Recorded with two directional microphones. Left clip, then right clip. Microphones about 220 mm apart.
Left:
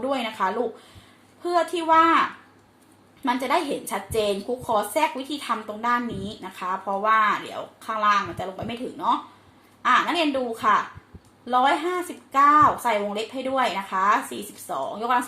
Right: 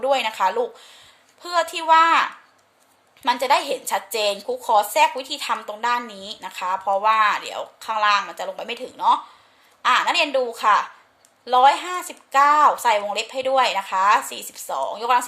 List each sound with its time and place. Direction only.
0.0 s a woman's voice: 40° right (ahead or behind)
3.2 s a woman's voice: 40° right (ahead or behind)